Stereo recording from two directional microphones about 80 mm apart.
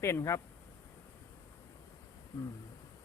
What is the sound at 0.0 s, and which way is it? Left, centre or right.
Speech, left.